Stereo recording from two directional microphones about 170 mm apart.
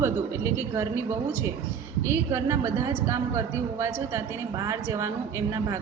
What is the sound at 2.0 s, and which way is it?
A woman's voice, 15° right (ahead or behind).